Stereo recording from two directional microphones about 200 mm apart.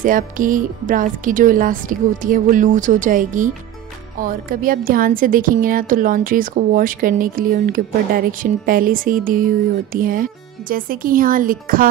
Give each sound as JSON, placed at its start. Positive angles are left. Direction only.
{"t": 0.0, "sound": "a woman's voice", "side_deg": -40}